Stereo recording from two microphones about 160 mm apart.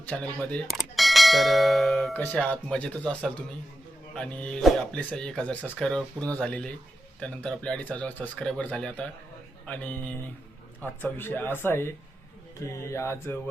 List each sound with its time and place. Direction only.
0.1 s speech: 5° left (ahead or behind)